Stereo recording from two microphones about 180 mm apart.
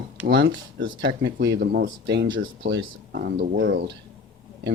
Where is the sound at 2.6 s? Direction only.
55° right (ahead or behind).